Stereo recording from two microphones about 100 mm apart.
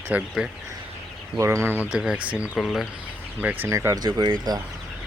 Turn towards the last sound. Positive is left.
turn(degrees=-40)  # may be behind; listen again after turning